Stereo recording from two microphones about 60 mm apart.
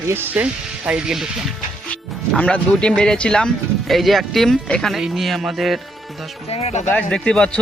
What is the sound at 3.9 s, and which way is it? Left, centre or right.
Music, centre.